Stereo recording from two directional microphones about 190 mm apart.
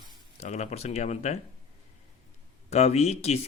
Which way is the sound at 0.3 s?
35° left (ahead or behind).